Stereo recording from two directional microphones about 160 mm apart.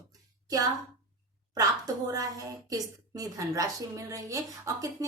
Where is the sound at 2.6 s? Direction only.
20° right (ahead or behind).